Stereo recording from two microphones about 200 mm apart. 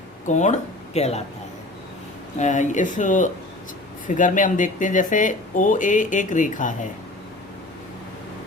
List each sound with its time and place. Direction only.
0.3 s speech: 35° left (ahead or behind)
2.4 s speech: 40° left (ahead or behind)